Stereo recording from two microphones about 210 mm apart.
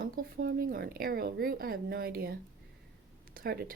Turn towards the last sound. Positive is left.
turn(degrees=-45)  # may be behind; listen again after turning